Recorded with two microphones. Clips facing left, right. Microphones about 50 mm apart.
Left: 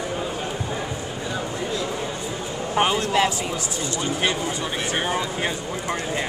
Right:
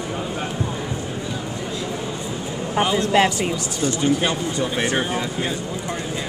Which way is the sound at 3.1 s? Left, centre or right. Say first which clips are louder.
Right 4 dB; right.